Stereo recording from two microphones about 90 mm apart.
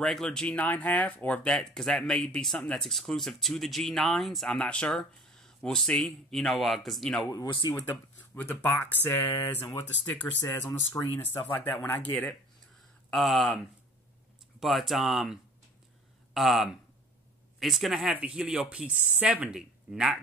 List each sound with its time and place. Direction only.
0.0 s speech: 5° left (ahead or behind)
7.7 s speech: 20° left (ahead or behind)
13.1 s speech: centre (ahead or behind)
14.6 s speech: centre (ahead or behind)
16.3 s speech: centre (ahead or behind)